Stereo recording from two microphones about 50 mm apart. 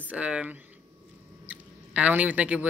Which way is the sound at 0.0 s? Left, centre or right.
Right.